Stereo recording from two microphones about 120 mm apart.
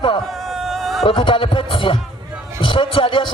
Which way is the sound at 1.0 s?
45° left (ahead or behind).